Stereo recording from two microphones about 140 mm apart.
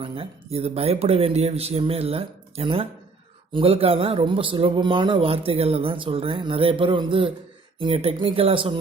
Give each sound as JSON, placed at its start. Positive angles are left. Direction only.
{"t": 0.0, "sound": "a man's voice", "side_deg": -45}